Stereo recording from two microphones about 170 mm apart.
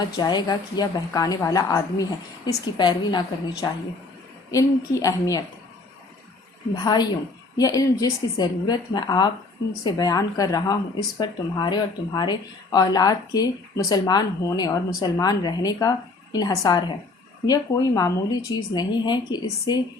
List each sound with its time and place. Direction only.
0.0 s speech: 25° left (ahead or behind)
6.8 s speech: 25° left (ahead or behind)